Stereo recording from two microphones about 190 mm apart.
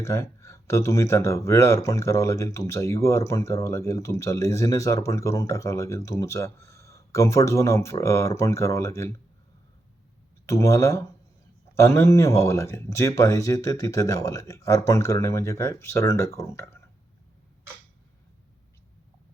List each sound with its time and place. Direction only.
0.0 s speech: 15° left (ahead or behind)
10.4 s speech: 15° left (ahead or behind)